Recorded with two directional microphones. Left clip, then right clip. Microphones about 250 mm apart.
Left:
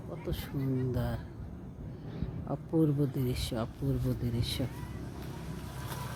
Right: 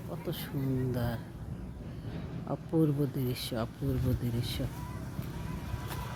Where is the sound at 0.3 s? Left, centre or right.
Centre.